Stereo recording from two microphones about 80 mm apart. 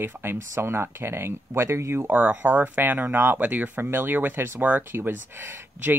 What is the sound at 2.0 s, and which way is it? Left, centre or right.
Speech, centre.